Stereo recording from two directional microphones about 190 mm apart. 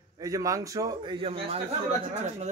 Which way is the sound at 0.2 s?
15° right (ahead or behind).